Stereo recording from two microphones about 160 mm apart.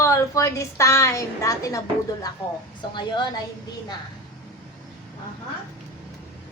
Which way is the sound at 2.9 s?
30° left (ahead or behind).